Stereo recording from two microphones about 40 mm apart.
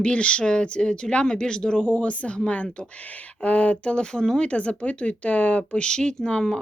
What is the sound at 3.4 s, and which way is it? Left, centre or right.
Speech, left.